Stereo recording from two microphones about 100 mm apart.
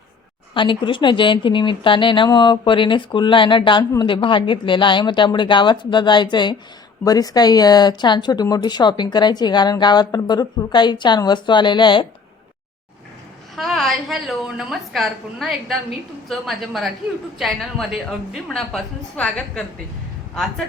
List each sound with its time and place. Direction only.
0.5 s speech: 55° left (ahead or behind)
7.0 s speech: 40° left (ahead or behind)
13.6 s a woman's voice: centre (ahead or behind)